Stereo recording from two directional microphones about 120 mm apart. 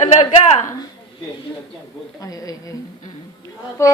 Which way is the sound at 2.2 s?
30° left (ahead or behind).